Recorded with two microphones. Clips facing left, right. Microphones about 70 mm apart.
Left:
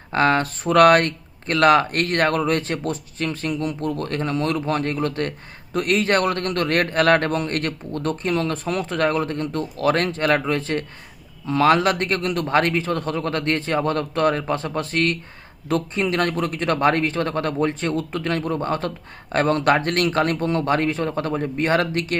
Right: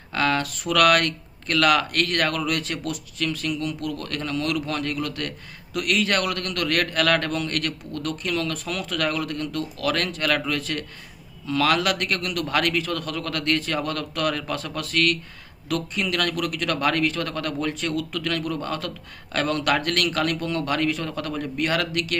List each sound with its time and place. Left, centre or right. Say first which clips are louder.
0.1 s a man's voice: left 5 dB; left